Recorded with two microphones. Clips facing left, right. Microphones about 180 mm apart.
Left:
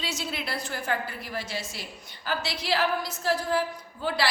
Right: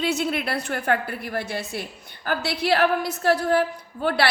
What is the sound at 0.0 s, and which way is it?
A woman's voice, 60° right (ahead or behind).